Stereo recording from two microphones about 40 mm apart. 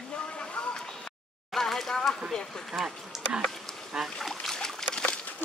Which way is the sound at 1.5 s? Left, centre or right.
Centre.